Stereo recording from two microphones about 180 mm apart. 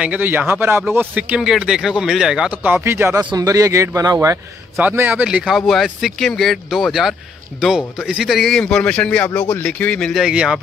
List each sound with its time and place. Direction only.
0.0 s a man's voice: 10° right (ahead or behind)
4.7 s a man's voice: 10° right (ahead or behind)